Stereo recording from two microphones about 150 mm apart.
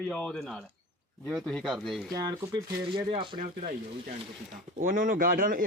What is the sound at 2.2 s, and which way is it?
Speech, 25° right (ahead or behind).